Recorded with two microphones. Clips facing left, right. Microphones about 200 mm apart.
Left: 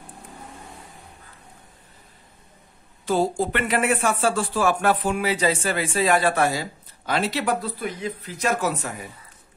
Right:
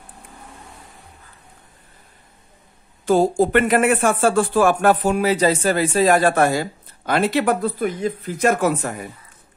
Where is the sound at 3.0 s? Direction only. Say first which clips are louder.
Right 6 dB; 45° right (ahead or behind).